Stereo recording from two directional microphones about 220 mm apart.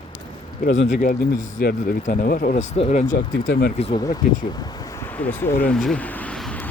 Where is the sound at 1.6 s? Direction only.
45° left (ahead or behind).